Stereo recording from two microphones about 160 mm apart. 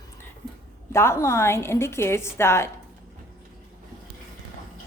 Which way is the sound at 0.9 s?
15° left (ahead or behind).